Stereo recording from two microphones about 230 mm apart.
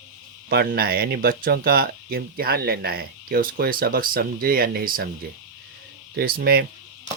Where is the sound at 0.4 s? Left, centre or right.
Right.